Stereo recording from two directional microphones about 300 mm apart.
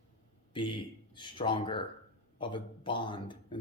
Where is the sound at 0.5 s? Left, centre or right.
Centre.